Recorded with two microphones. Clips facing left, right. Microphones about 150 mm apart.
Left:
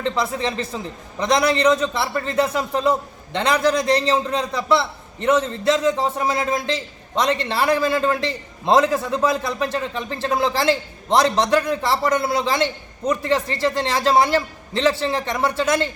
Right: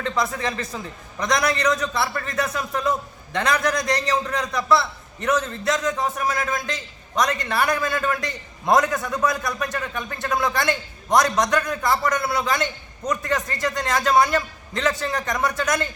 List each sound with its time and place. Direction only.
0.0 s a man's voice: 25° left (ahead or behind)